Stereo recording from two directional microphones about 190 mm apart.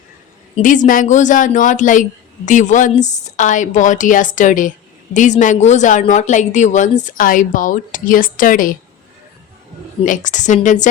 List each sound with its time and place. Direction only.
0.5 s speech: 40° left (ahead or behind)
10.1 s speech: 40° left (ahead or behind)